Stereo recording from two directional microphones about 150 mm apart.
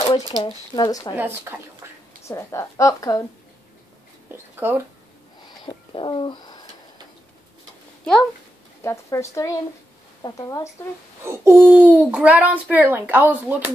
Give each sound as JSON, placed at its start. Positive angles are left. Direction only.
{"t": 0.3, "sound": "a woman's voice", "side_deg": 25}
{"t": 1.1, "sound": "a child's voice", "side_deg": -15}
{"t": 2.2, "sound": "a woman's voice", "side_deg": 20}
{"t": 4.6, "sound": "a child's voice", "side_deg": -15}
{"t": 5.5, "sound": "bird", "side_deg": 30}
{"t": 8.0, "sound": "a child's voice", "side_deg": 5}
{"t": 8.8, "sound": "a woman's voice", "side_deg": 20}
{"t": 11.2, "sound": "a child's voice", "side_deg": -15}